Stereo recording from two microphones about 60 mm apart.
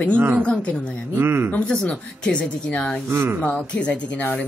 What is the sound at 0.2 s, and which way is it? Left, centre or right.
Speech, right.